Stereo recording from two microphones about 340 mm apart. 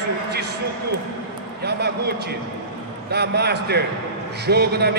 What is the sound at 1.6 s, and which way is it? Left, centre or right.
A man's voice, right.